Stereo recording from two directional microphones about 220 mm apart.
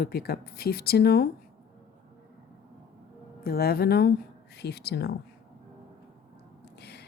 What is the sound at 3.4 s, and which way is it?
A woman's voice, 45° left (ahead or behind).